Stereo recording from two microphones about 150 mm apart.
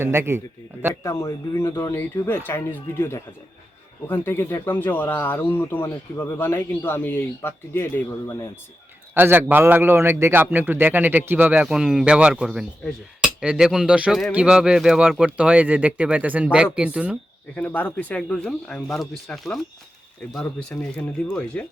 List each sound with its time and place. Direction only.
0.0 s speech: 15° right (ahead or behind)
1.0 s speech: 20° left (ahead or behind)
9.1 s a man's voice: 15° right (ahead or behind)
17.5 s speech: 10° left (ahead or behind)